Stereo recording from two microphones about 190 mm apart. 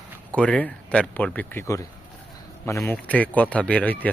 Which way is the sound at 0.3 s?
5° left (ahead or behind).